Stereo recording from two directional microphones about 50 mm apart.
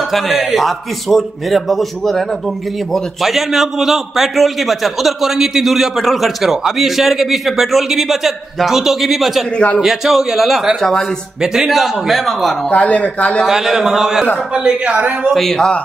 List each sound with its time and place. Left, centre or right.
0.1 s a man's voice: centre
10.8 s speech: centre
11.4 s a man's voice: centre
12.6 s speech: left
13.5 s a man's voice: centre
14.9 s a woman's voice: right
15.5 s speech: centre